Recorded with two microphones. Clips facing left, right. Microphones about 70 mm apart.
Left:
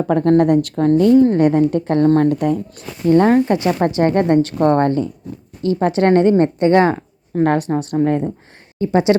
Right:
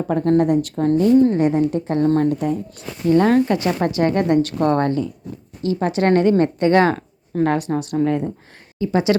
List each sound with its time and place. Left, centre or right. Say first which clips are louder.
0.1 s a woman's voice: left 3 dB; left
1.4 s a woman's voice: left 4 dB; left
3.2 s speech: left 2 dB; left
7.4 s speech: left 3 dB; left